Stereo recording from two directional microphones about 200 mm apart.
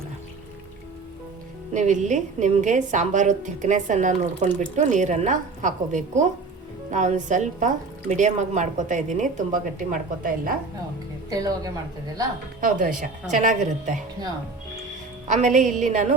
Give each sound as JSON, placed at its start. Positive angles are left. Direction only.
{"t": 1.7, "sound": "a woman's voice", "side_deg": -40}
{"t": 11.3, "sound": "a woman's voice", "side_deg": -20}
{"t": 12.5, "sound": "a woman's voice", "side_deg": -45}
{"t": 15.5, "sound": "a woman's voice", "side_deg": -40}